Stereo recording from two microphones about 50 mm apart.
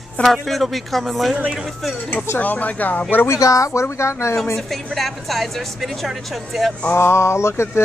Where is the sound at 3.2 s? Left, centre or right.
Left.